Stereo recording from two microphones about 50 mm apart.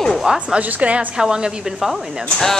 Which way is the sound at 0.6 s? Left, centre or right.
Right.